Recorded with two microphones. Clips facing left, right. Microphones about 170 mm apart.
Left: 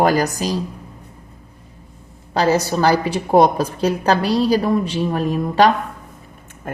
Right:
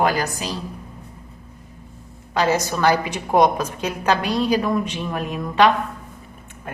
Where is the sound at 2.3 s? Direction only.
35° left (ahead or behind).